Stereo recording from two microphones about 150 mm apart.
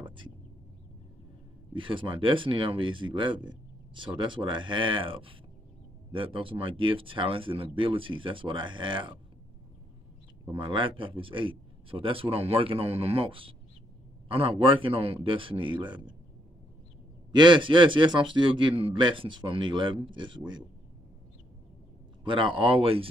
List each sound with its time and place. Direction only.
0.0 s a sound: 35° right (ahead or behind)
1.7 s speech: 35° right (ahead or behind)
10.4 s speech: 35° right (ahead or behind)
17.3 s speech: 30° right (ahead or behind)
22.2 s speech: 35° right (ahead or behind)